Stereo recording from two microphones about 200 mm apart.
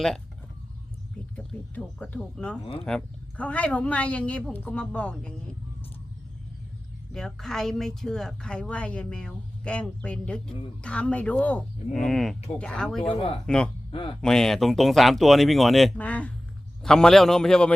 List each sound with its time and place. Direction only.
1.4 s a woman's voice: 5° left (ahead or behind)
7.1 s speech: centre (ahead or behind)
13.0 s speech: 25° left (ahead or behind)
14.2 s speech: centre (ahead or behind)